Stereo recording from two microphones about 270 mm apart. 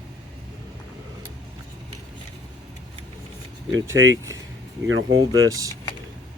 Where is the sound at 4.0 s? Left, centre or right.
Right.